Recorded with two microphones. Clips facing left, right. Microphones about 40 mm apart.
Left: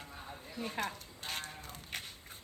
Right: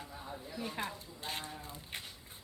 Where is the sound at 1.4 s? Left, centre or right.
Left.